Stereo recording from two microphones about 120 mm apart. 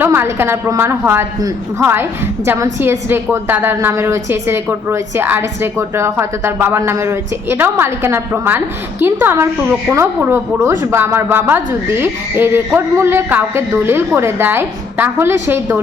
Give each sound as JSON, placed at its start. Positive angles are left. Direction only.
{"t": 0.0, "sound": "a woman's voice", "side_deg": -20}